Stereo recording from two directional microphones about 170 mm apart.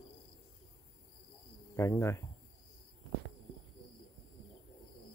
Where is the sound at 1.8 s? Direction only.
15° left (ahead or behind).